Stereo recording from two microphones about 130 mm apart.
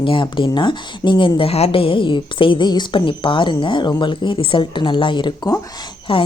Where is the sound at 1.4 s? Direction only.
50° left (ahead or behind).